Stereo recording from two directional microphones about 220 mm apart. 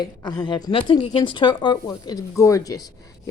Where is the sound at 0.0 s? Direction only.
15° left (ahead or behind).